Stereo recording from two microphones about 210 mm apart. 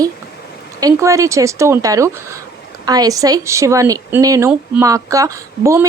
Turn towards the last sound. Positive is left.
turn(degrees=-15)  # may be behind; listen again after turning